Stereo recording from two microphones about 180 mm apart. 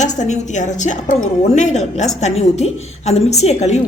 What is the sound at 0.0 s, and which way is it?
A woman's voice, 40° left (ahead or behind).